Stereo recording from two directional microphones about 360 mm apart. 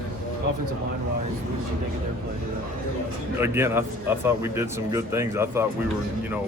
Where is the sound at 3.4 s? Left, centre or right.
Centre.